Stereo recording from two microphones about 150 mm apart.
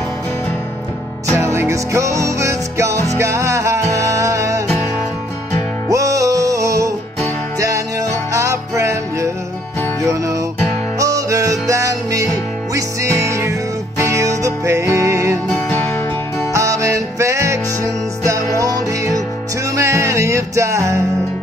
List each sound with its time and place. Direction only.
1.3 s music: 20° right (ahead or behind)
5.9 s music: 20° right (ahead or behind)
15.4 s music: 15° left (ahead or behind)
16.5 s music: 20° right (ahead or behind)